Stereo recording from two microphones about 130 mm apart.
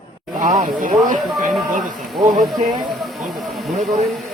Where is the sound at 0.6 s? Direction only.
90° right.